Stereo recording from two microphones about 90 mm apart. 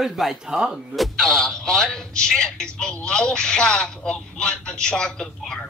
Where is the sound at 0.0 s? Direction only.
Centre (ahead or behind).